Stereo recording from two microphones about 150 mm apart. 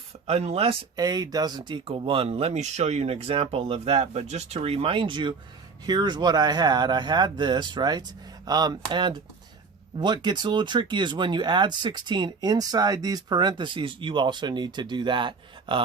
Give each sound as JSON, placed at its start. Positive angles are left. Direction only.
{"t": 0.3, "sound": "speech", "side_deg": -45}
{"t": 0.9, "sound": "speech", "side_deg": -25}